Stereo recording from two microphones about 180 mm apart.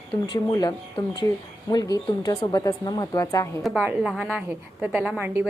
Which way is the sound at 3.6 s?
5° right (ahead or behind).